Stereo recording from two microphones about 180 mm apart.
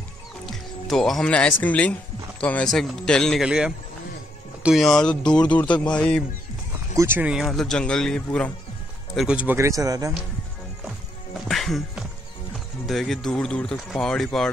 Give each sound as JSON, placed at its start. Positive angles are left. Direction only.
{"t": 0.5, "sound": "speech", "side_deg": 0}
{"t": 7.0, "sound": "speech", "side_deg": -10}
{"t": 11.4, "sound": "music", "side_deg": 0}
{"t": 12.5, "sound": "speech", "side_deg": 0}